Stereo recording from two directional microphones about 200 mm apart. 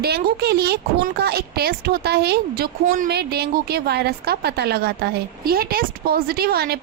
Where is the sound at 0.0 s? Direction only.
50° right (ahead or behind).